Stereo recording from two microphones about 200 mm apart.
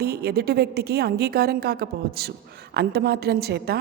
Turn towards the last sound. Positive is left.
turn(degrees=-50)  # may be behind; listen again after turning